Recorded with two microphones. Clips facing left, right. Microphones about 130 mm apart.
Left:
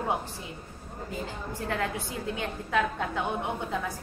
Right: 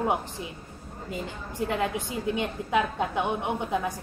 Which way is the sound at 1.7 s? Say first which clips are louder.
Right 2 dB; 15° right (ahead or behind).